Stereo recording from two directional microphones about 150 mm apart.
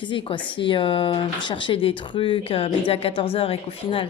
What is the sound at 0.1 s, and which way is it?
Speech, 35° left (ahead or behind).